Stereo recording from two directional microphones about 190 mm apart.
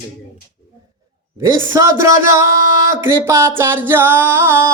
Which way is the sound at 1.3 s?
15° right (ahead or behind).